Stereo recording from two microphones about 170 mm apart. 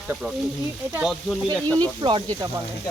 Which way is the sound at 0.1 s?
5° right (ahead or behind).